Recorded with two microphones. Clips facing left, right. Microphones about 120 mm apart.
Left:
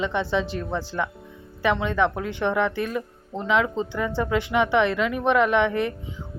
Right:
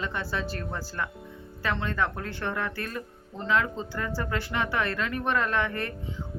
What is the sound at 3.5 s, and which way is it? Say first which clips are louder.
Speech: left 5 dB; 90° left.